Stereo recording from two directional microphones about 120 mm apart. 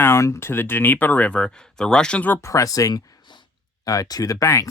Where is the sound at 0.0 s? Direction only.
25° left (ahead or behind).